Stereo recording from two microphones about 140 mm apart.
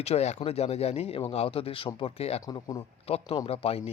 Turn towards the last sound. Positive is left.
turn(degrees=45)  # may be behind; listen again after turning